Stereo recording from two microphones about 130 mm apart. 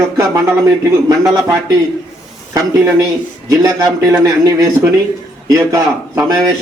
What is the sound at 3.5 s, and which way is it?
Speech, 25° right (ahead or behind).